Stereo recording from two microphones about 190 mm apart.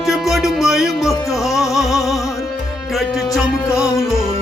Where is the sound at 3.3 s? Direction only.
5° right (ahead or behind).